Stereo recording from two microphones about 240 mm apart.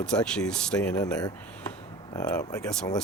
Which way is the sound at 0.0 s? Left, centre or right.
Centre.